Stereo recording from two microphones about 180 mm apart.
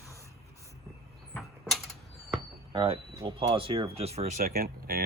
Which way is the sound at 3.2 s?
30° right (ahead or behind).